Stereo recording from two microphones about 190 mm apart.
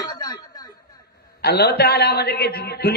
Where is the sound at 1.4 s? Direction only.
60° left (ahead or behind).